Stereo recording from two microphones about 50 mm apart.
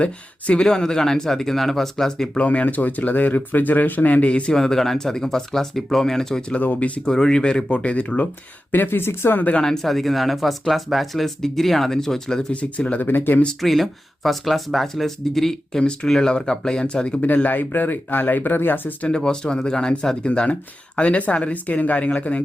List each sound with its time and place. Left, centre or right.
0.0 s speech: left
0.6 s speech: centre
2.4 s speech: left
4.5 s speech: centre
6.6 s speech: left
7.0 s speech: centre; by 8.3 s left
8.7 s speech: left
9.6 s speech: centre
12.5 s speech: left
13.0 s speech: left
13.6 s speech: centre; by 18.9 s left
19.0 s speech: centre